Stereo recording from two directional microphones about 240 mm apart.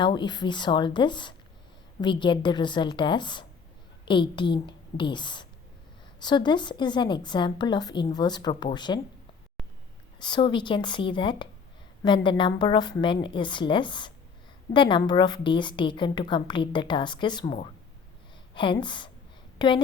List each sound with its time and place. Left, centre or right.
0.0 s a woman's voice: centre
10.2 s a woman's voice: centre